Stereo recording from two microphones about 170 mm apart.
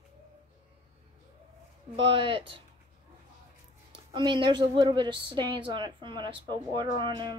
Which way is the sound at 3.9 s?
30° right (ahead or behind).